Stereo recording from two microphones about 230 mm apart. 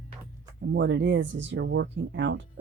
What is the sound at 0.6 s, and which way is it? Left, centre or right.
Speech, right.